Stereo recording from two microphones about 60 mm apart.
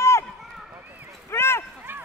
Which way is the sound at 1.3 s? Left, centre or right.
Left.